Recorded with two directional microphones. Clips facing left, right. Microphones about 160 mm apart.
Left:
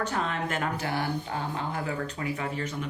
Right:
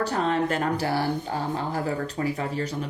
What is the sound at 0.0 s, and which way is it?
Speech, 35° right (ahead or behind).